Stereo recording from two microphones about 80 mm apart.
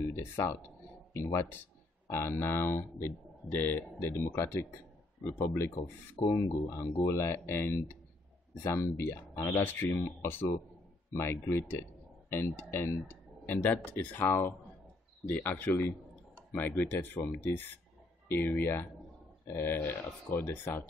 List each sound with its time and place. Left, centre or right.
1.1 s speech: left